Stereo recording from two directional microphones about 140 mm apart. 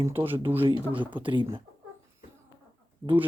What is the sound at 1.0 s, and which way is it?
Speech, 35° right (ahead or behind).